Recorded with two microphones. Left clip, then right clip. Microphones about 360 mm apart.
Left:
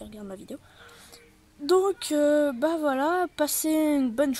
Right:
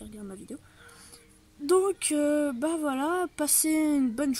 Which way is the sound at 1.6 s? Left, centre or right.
Centre.